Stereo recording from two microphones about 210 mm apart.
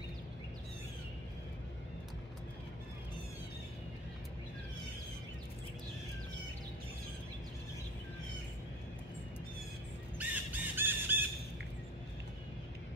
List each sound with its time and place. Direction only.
10.1 s squawk: 10° right (ahead or behind)